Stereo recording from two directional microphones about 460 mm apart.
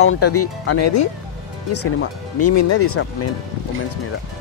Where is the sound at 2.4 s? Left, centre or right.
Left.